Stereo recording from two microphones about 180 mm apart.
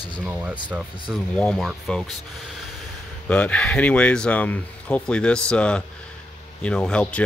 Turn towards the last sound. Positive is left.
turn(degrees=5)  # may be behind; listen again after turning